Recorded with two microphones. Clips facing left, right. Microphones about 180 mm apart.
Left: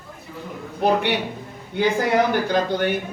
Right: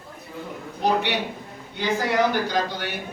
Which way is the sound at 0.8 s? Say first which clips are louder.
Left 3 dB; 55° left (ahead or behind).